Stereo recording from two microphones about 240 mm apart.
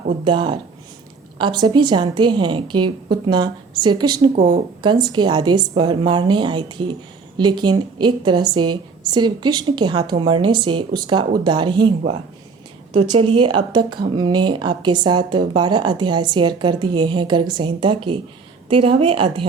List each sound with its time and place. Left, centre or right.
0.3 s a woman's voice: centre
13.0 s a woman's voice: right